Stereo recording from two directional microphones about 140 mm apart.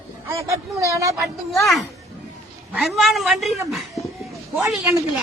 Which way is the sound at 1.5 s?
Centre (ahead or behind).